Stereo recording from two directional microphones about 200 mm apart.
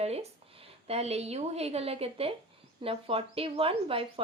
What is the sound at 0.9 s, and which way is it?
A woman's voice, 30° right (ahead or behind).